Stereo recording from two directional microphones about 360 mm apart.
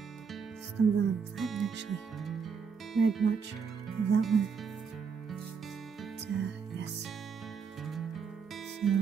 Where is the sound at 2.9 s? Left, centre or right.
Centre.